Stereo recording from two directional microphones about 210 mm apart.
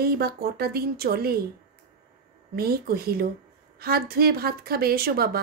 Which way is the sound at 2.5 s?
45° right (ahead or behind).